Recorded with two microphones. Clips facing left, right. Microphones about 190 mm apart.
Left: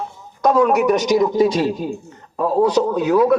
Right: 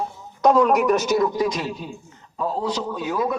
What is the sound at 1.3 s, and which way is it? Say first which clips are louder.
Speech: left 8 dB; 30° left (ahead or behind).